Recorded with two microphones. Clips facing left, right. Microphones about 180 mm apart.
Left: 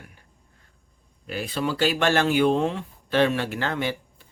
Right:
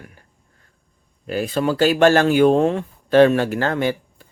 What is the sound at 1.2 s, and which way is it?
Speech, 45° right (ahead or behind).